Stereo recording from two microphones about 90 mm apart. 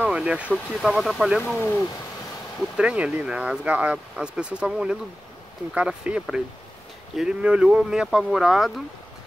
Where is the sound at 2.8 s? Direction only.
15° right (ahead or behind).